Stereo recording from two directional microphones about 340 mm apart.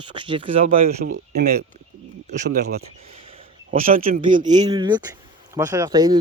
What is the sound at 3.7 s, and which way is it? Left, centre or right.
Speech, right.